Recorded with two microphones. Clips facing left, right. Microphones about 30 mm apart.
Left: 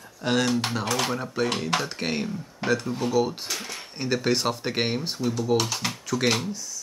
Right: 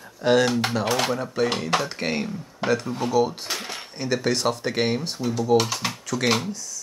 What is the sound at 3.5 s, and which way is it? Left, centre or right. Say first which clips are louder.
Speech: right 2 dB; right.